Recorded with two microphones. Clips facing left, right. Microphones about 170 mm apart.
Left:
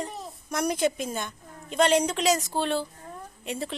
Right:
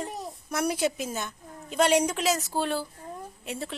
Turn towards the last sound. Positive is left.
turn(degrees=0)  # may be behind; listen again after turning